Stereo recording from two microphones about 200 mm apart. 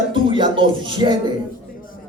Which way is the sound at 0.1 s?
25° right (ahead or behind).